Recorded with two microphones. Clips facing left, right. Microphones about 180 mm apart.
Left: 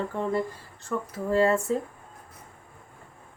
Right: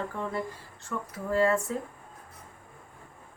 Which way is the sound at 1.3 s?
25° left (ahead or behind).